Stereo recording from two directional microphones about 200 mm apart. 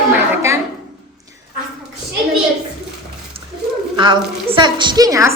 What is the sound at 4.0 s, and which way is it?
A woman's voice, 25° right (ahead or behind).